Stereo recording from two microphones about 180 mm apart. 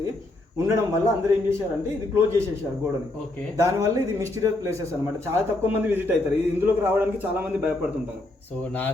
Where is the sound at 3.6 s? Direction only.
15° right (ahead or behind).